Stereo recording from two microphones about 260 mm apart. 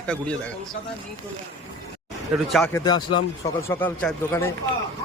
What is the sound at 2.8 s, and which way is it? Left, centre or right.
Speech, centre.